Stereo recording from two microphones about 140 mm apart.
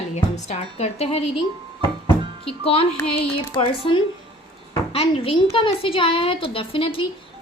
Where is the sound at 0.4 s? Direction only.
50° left (ahead or behind).